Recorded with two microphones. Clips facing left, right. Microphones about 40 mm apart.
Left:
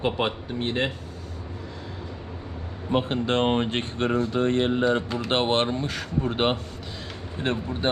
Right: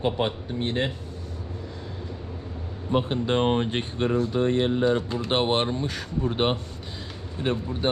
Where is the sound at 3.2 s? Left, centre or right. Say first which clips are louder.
Even; left.